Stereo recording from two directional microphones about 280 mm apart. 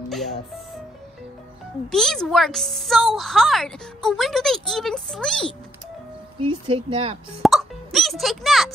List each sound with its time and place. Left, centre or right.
1.9 s a woman's voice: centre
6.4 s speech: centre
7.4 s a child's voice: centre